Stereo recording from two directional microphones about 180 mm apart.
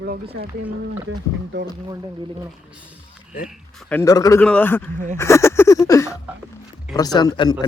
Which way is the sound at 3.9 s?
15° left (ahead or behind).